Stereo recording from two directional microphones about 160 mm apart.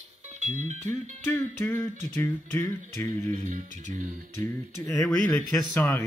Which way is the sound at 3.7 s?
50° right (ahead or behind).